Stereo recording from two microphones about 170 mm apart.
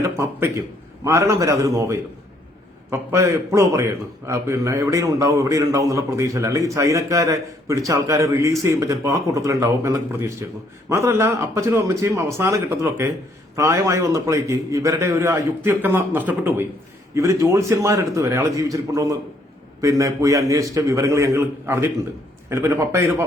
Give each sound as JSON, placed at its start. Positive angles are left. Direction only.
{"t": 0.2, "sound": "a man's voice", "side_deg": -15}